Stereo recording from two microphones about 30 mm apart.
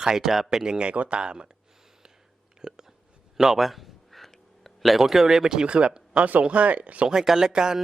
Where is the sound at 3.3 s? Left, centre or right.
Centre.